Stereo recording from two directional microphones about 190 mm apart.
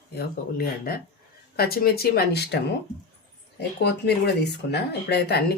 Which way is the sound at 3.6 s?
60° left (ahead or behind).